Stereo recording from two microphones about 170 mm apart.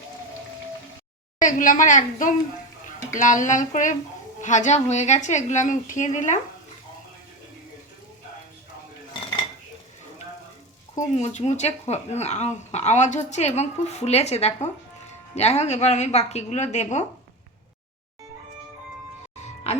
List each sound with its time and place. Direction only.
1.4 s a woman's voice: 50° left (ahead or behind)
10.9 s speech: 45° left (ahead or behind)